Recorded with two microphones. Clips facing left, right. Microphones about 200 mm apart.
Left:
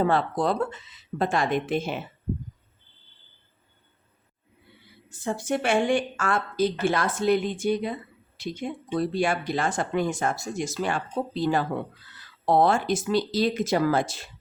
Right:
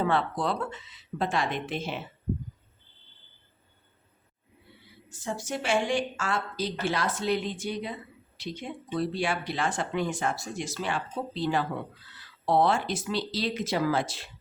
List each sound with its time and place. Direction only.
0.0 s speech: 40° left (ahead or behind)
5.0 s speech: 55° left (ahead or behind)